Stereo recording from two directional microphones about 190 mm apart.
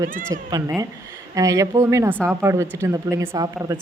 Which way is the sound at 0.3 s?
15° right (ahead or behind).